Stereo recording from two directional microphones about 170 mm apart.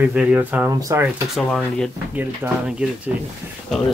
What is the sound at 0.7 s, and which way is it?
Speech, 20° right (ahead or behind).